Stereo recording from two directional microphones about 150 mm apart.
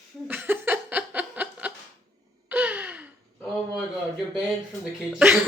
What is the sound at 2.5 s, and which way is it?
Gasp, 10° right (ahead or behind).